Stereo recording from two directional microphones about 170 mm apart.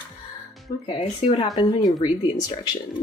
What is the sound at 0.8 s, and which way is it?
A woman's voice, 30° left (ahead or behind).